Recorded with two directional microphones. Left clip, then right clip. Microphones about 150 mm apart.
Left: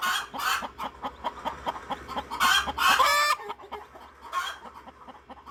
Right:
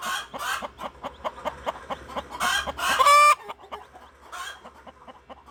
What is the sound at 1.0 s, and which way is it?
Chicken, 20° right (ahead or behind).